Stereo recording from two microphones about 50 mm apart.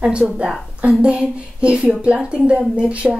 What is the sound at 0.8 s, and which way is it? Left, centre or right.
A woman's voice, right.